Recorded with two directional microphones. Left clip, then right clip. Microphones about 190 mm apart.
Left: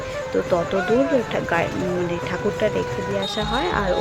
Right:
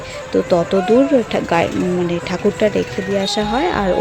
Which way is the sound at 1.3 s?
35° right (ahead or behind).